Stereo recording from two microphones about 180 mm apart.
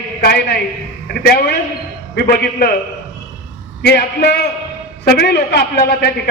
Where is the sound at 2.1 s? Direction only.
55° left (ahead or behind).